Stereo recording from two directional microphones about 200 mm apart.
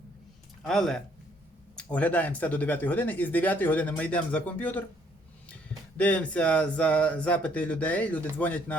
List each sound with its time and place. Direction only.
0.6 s speech: centre (ahead or behind)
6.0 s speech: 5° left (ahead or behind)